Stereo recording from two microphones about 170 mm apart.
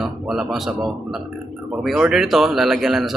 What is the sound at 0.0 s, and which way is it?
Speech, 5° right (ahead or behind).